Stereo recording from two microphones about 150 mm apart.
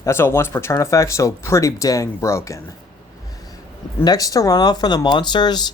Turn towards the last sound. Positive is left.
turn(degrees=30)  # may be behind; listen again after turning